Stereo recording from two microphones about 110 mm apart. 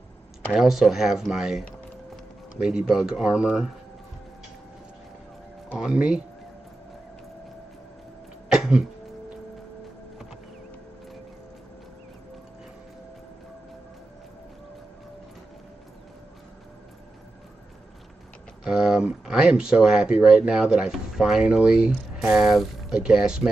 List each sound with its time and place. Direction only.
0.5 s speech: 5° right (ahead or behind)
2.6 s speech: 5° right (ahead or behind)
5.8 s speech: 5° right (ahead or behind)
8.5 s throat clearing: 5° right (ahead or behind)
18.6 s speech: 5° right (ahead or behind)